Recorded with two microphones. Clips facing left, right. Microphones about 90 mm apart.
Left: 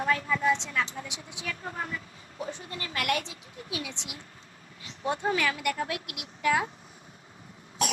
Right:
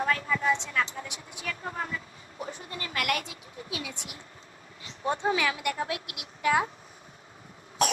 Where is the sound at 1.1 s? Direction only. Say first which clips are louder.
Even; 20° left (ahead or behind).